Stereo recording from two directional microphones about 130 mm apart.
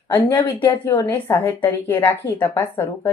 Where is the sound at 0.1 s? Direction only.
25° left (ahead or behind).